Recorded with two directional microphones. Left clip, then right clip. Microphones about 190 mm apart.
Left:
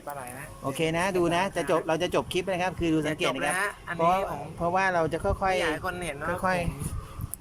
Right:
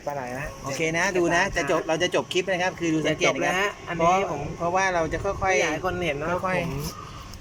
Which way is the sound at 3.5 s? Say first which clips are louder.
Right 4 dB; 15° right (ahead or behind).